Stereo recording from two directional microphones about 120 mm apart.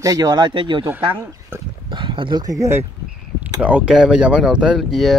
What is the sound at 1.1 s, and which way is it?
Speech, 20° right (ahead or behind).